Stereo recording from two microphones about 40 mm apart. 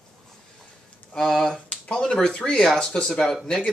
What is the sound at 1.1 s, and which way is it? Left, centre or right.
Speech, centre.